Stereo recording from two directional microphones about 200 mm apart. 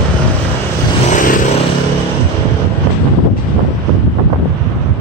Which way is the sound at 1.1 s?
40° left (ahead or behind).